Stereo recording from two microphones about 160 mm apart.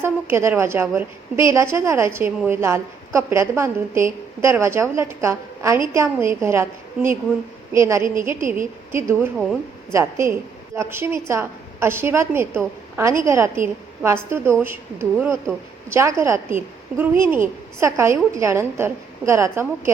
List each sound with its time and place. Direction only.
0.0 s a woman's voice: 15° right (ahead or behind)
8.0 s a woman's voice: 55° right (ahead or behind)
8.9 s a woman's voice: 15° right (ahead or behind)